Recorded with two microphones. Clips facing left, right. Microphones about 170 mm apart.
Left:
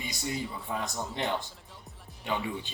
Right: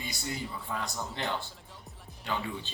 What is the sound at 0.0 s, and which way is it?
Speech, 20° left (ahead or behind).